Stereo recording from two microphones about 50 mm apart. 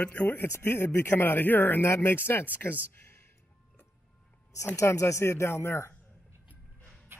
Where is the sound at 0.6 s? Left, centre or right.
Left.